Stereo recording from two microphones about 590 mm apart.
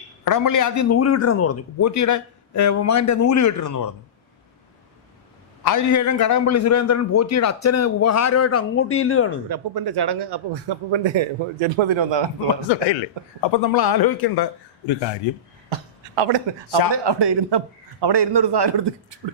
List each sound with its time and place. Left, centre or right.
0.3 s a man's voice: left
5.6 s a man's voice: left
9.5 s a man's voice: right
12.6 s a man's voice: left
15.7 s speech: right
16.9 s a man's voice: right